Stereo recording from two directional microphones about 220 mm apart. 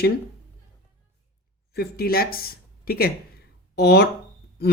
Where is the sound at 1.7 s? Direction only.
45° left (ahead or behind).